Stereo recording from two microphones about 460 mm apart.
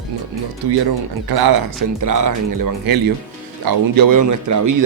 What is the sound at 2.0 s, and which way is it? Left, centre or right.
Speech, right.